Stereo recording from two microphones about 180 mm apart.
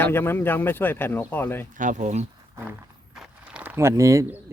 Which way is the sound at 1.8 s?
45° right (ahead or behind).